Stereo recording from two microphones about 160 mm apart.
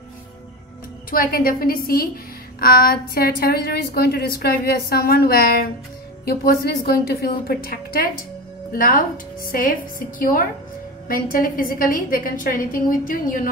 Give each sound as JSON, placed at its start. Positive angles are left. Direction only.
{"t": 1.1, "sound": "a woman's voice", "side_deg": 65}